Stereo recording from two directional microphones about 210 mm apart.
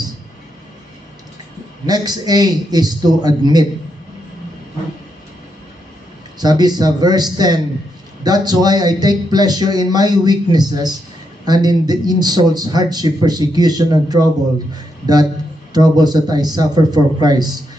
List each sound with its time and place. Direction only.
1.9 s speech: 20° right (ahead or behind)
6.4 s speech: 20° right (ahead or behind)